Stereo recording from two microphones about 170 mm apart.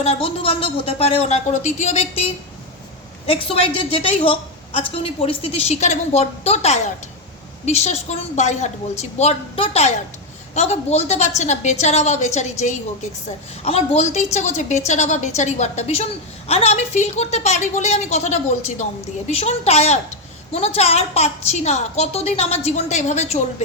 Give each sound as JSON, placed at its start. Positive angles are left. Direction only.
{"t": 0.0, "sound": "a woman's voice", "side_deg": 35}
{"t": 3.2, "sound": "a woman's voice", "side_deg": 35}